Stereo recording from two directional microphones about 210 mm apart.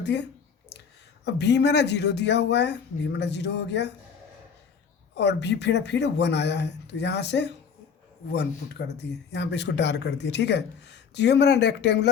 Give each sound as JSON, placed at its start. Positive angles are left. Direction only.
{"t": 0.0, "sound": "speech", "side_deg": 55}
{"t": 5.1, "sound": "speech", "side_deg": 55}